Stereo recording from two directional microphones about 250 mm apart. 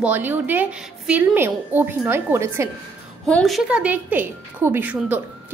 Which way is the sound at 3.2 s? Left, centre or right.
Centre.